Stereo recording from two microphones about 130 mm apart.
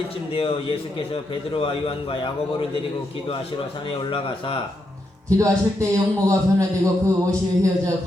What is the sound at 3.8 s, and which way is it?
Speech, 45° left (ahead or behind).